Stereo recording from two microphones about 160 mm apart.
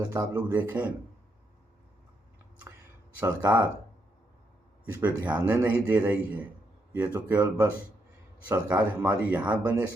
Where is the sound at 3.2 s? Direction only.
10° right (ahead or behind).